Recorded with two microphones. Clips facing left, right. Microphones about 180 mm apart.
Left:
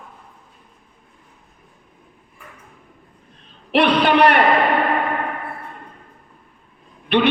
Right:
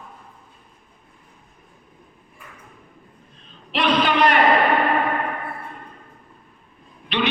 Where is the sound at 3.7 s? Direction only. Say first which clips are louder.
Left 5 dB; 65° left (ahead or behind).